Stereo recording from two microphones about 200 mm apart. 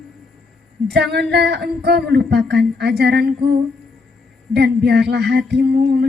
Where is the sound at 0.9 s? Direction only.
55° right (ahead or behind).